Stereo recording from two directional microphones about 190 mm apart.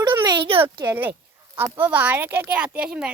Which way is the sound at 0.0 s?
25° right (ahead or behind).